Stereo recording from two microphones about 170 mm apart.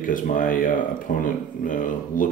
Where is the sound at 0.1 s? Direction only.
55° left (ahead or behind).